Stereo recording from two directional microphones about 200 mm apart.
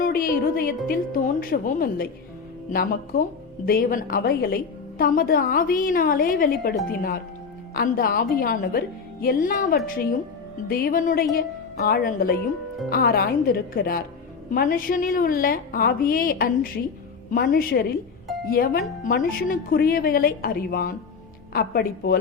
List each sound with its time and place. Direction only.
0.0 s a woman's voice: 50° left (ahead or behind)